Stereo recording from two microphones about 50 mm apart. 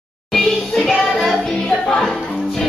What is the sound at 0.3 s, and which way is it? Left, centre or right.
Music, centre.